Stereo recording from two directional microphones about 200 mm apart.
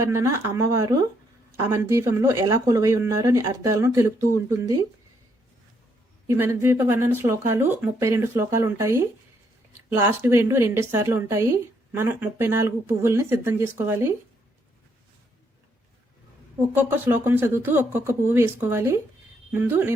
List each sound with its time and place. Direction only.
0.0 s a woman's voice: 15° right (ahead or behind)
6.2 s a woman's voice: 10° right (ahead or behind)
16.7 s a woman's voice: 10° right (ahead or behind)